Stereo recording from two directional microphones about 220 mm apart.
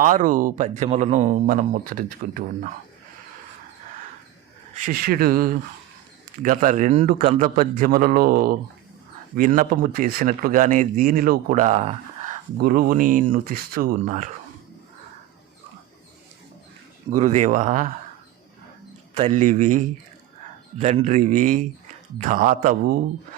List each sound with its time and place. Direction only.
0.0 s speech: 35° right (ahead or behind)
4.7 s speech: 35° right (ahead or behind)
7.5 s speech: 40° right (ahead or behind)
12.5 s speech: 40° right (ahead or behind)
17.1 s speech: 30° right (ahead or behind)
19.3 s speech: 35° right (ahead or behind)